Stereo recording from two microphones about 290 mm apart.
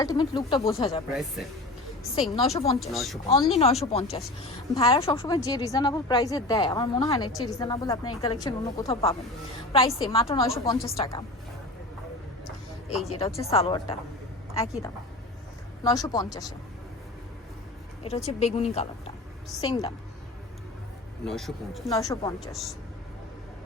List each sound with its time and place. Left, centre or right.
0.0 s a woman's voice: centre
2.3 s a woman's voice: centre
2.8 s speech: centre
3.2 s a woman's voice: left
13.1 s a woman's voice: centre
18.0 s a woman's voice: left
21.2 s speech: centre
21.8 s a woman's voice: centre